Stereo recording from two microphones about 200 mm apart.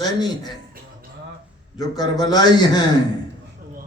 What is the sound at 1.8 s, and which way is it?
A man's voice, 20° left (ahead or behind).